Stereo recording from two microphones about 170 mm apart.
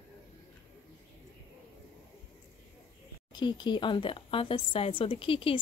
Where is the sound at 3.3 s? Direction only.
25° left (ahead or behind).